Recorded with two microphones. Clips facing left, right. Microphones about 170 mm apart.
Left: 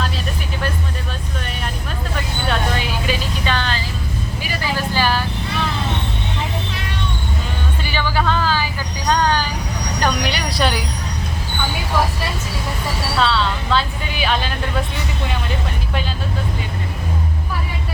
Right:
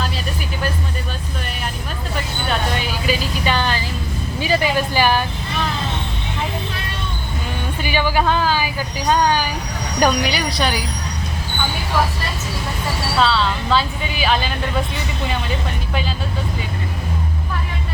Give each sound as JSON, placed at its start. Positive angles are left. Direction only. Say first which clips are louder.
{"t": 2.5, "sound": "a sound", "louder": "left 1 dB", "side_deg": 0}
{"t": 3.4, "sound": "vehicle", "louder": "right 2 dB", "side_deg": -15}
{"t": 4.4, "sound": "vehicle", "louder": "right 10 dB", "side_deg": -25}
{"t": 4.9, "sound": "vehicle", "louder": "right 2 dB", "side_deg": -15}
{"t": 7.9, "sound": "a sound", "louder": "right 3 dB", "side_deg": -15}
{"t": 10.0, "sound": "vehicle", "louder": "right 4 dB", "side_deg": -5}
{"t": 13.1, "sound": "music", "louder": "right 1 dB", "side_deg": 0}